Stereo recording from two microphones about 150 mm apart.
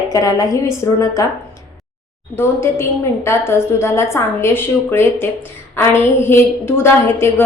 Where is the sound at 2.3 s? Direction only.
15° left (ahead or behind).